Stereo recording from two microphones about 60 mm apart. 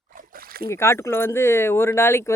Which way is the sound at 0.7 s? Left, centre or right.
Left.